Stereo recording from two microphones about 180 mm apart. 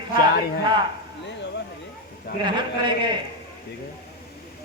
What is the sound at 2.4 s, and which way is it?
Speech, 25° right (ahead or behind).